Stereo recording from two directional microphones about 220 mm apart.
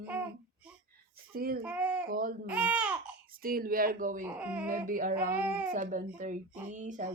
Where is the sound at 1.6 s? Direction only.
5° right (ahead or behind).